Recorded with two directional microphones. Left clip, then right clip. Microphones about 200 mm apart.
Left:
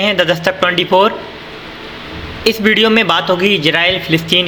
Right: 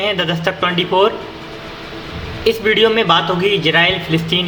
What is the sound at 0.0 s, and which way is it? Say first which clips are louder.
A man's voice: left 4 dB; 20° left (ahead or behind).